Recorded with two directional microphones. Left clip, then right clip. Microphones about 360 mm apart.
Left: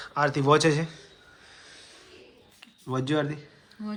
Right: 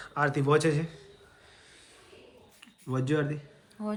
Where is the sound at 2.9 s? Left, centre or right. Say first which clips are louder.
Left 2 dB; centre.